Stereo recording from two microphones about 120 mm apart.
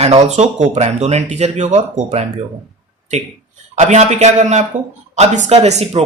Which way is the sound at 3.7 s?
70° right (ahead or behind).